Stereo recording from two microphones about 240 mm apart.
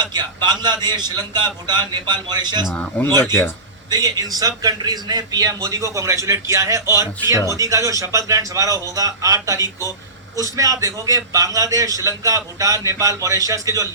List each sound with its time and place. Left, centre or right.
0.0 s a man's voice: centre
2.6 s speech: centre
3.1 s a man's voice: centre